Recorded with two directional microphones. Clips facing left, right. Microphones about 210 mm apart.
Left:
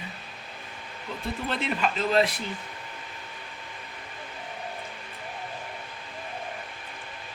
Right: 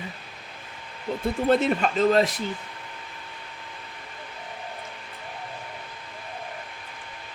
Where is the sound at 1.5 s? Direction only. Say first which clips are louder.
Right 8 dB; 45° right (ahead or behind).